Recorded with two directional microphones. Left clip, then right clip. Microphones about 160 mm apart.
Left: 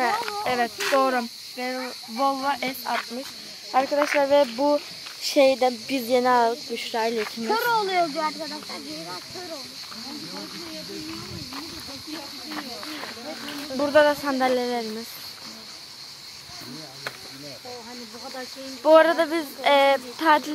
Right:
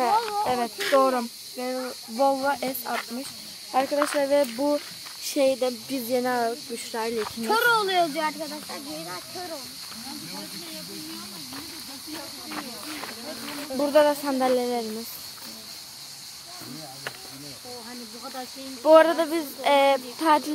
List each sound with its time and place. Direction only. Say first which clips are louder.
0.0 s snake: right 2 dB; 5° right (ahead or behind)
0.9 s speech: right 1 dB; 5° right (ahead or behind)
8.7 s speech: left 1 dB; 40° left (ahead or behind)
13.7 s speech: left 1 dB; centre (ahead or behind)
18.8 s speech: even; centre (ahead or behind)